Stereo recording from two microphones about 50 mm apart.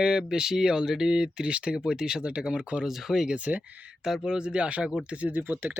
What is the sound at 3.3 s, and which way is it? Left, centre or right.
Speech, right.